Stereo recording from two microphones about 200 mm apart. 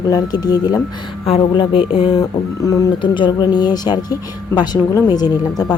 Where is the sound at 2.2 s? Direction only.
15° left (ahead or behind).